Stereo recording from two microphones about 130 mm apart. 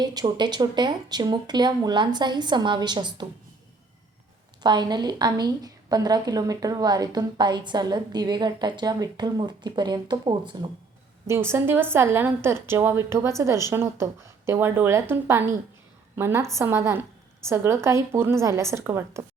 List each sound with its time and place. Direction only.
0.0 s a woman's voice: 30° right (ahead or behind)
4.6 s a woman's voice: 35° right (ahead or behind)
11.3 s a woman's voice: 20° right (ahead or behind)